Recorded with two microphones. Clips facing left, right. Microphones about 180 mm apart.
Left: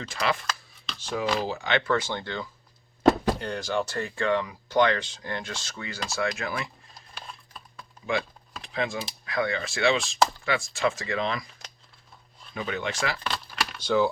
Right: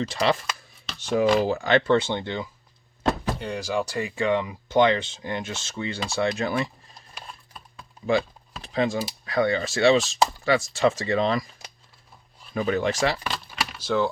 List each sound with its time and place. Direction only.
0.0 s speech: 30° right (ahead or behind)
0.9 s speech: 60° right (ahead or behind)
1.5 s speech: 40° right (ahead or behind)
1.9 s speech: 25° right (ahead or behind)
3.3 s speech: 5° right (ahead or behind); by 6.7 s 30° right (ahead or behind)
8.6 s speech: 35° right (ahead or behind)
10.0 s speech: centre (ahead or behind)
10.4 s speech: 35° right (ahead or behind)
12.5 s speech: 40° right (ahead or behind)
13.2 s a sound: 5° right (ahead or behind)